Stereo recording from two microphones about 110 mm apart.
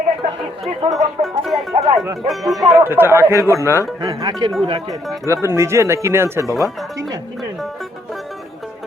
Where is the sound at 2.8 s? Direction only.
20° right (ahead or behind).